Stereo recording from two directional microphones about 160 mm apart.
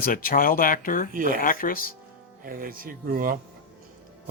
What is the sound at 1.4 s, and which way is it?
Speech, 60° left (ahead or behind).